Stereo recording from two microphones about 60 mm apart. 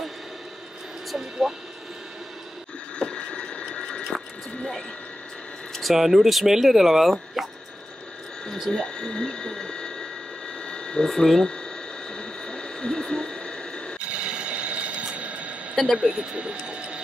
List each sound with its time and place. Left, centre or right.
1.4 s speech: centre
3.0 s a sound: centre
5.8 s speech: centre
8.7 s speech: centre
10.6 s a sound: centre
11.1 s speech: centre
12.1 s a sound: centre
14.1 s mechanisms: centre
15.7 s speech: centre
16.0 s speech: centre